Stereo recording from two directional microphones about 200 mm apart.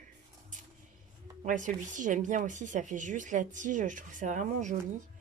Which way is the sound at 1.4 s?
40° right (ahead or behind).